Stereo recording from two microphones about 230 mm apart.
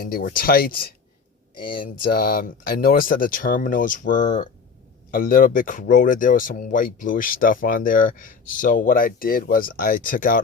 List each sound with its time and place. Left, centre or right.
0.0 s speech: left
2.1 s speech: left